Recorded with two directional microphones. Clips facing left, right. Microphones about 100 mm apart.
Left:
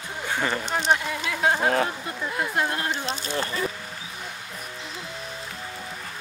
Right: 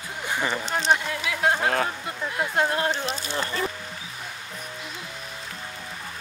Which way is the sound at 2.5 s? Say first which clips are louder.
Right 5 dB; 25° right (ahead or behind).